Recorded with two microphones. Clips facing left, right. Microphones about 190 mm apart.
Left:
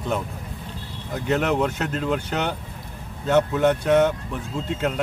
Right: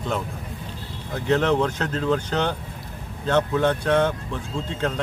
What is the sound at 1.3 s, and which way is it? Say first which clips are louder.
Speech: right 2 dB; 5° left (ahead or behind).